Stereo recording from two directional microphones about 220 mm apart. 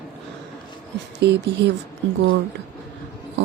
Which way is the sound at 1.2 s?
50° right (ahead or behind).